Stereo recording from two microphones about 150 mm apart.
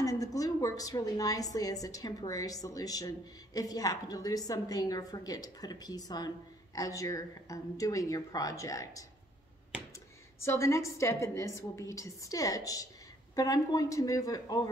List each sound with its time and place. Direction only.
0.0 s a woman's voice: 25° left (ahead or behind)
10.4 s a woman's voice: 20° left (ahead or behind)